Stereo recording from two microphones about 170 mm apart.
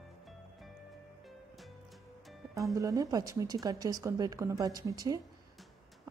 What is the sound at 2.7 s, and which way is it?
Speech, 20° right (ahead or behind).